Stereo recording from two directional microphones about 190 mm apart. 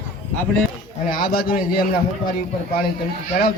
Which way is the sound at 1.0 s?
50° left (ahead or behind).